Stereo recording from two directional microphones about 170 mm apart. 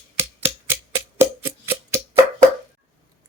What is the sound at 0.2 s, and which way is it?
Music, 15° right (ahead or behind).